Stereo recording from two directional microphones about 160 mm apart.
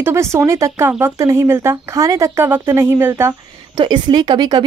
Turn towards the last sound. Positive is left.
turn(degrees=-25)  # may be behind; listen again after turning